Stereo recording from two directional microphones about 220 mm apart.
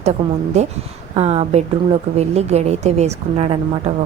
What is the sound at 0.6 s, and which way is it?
A woman's voice, 30° right (ahead or behind).